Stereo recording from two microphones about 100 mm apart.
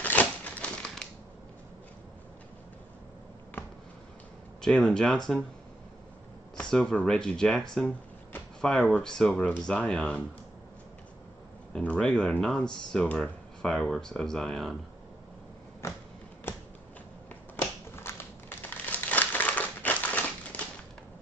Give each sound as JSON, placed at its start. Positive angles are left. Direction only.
{"t": 0.0, "sound": "crumpling", "side_deg": 15}
{"t": 3.6, "sound": "a sound", "side_deg": 20}
{"t": 4.6, "sound": "speech", "side_deg": 5}
{"t": 6.5, "sound": "speech", "side_deg": 5}
{"t": 11.7, "sound": "speech", "side_deg": 10}
{"t": 17.6, "sound": "crumpling", "side_deg": 25}